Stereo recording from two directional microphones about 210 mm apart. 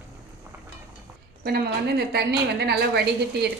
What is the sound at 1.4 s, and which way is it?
Speech, 45° right (ahead or behind).